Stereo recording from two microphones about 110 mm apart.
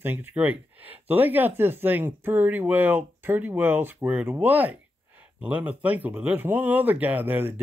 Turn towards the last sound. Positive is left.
turn(degrees=-20)  # may be behind; listen again after turning